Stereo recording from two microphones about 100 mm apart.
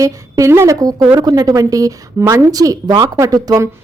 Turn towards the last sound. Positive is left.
turn(degrees=-35)  # may be behind; listen again after turning